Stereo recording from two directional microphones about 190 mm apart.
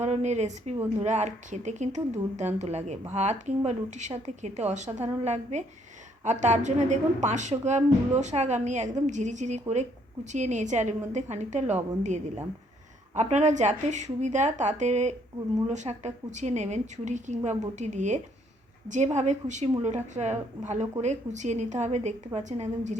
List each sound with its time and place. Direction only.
0.0 s a woman's voice: 35° right (ahead or behind)